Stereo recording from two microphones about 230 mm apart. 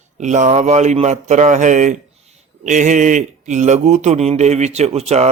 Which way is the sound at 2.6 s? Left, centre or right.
Right.